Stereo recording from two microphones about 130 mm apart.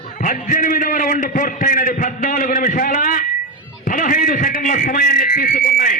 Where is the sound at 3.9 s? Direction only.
90° left.